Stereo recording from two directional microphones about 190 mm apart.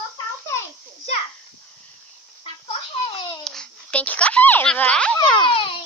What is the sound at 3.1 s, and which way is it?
Babbling, 25° left (ahead or behind).